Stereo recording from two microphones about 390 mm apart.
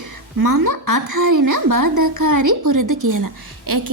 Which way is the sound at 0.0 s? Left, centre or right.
Right.